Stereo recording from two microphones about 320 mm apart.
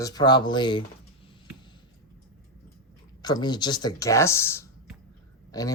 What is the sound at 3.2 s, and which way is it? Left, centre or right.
Speech, centre.